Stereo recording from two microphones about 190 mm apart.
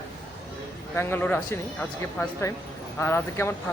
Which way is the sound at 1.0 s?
10° left (ahead or behind).